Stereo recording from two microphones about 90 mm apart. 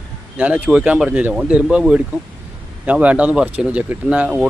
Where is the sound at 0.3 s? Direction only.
15° right (ahead or behind).